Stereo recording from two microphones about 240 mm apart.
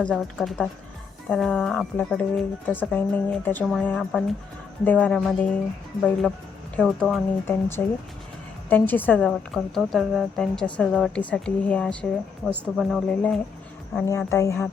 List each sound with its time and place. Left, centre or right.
0.0 s speech: centre
6.7 s speech: centre